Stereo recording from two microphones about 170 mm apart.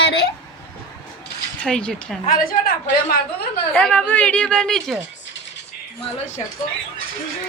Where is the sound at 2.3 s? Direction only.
60° left (ahead or behind).